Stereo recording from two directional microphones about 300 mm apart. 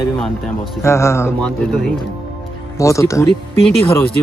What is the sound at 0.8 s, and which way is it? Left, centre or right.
Speech, centre.